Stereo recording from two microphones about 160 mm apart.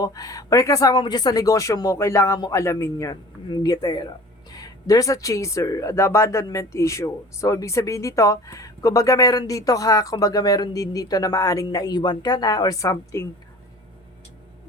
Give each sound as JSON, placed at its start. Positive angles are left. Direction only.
{"t": 0.0, "sound": "speech", "side_deg": 20}